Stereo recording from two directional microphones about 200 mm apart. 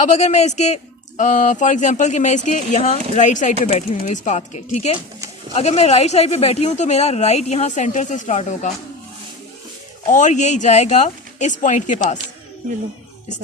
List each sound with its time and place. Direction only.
0.0 s speech: 35° left (ahead or behind)
10.1 s speech: 35° left (ahead or behind)